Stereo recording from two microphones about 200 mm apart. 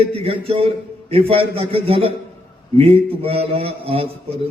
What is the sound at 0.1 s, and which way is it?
A man's voice, 30° right (ahead or behind).